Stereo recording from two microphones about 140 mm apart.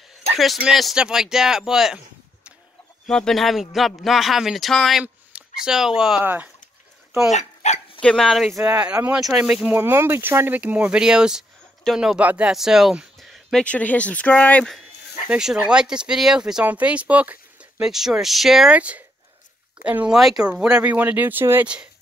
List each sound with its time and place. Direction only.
0.4 s speech: centre (ahead or behind)
3.1 s speech: 5° left (ahead or behind); by 6.5 s 10° right (ahead or behind)
7.3 s speech: 55° left (ahead or behind)
8.0 s speech: 5° left (ahead or behind)
15.2 s speech: 5° right (ahead or behind)